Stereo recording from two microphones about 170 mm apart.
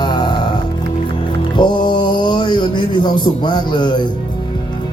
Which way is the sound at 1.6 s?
25° left (ahead or behind).